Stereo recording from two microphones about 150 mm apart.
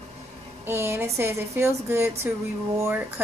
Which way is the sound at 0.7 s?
15° right (ahead or behind).